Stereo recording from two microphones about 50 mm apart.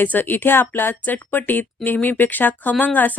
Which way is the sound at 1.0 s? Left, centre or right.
Left.